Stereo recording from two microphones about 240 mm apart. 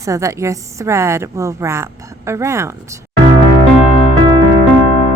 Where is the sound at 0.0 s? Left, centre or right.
Centre.